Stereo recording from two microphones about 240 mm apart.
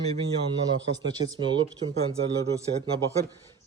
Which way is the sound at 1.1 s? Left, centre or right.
Centre.